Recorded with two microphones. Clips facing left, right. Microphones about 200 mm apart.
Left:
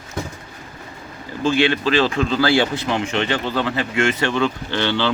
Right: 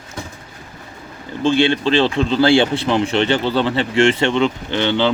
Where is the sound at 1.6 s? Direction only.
25° right (ahead or behind).